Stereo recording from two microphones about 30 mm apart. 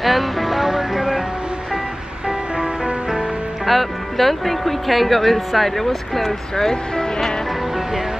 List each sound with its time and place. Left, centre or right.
0.0 s music: centre
2.5 s music: right
3.6 s speech: centre
6.5 s speech: centre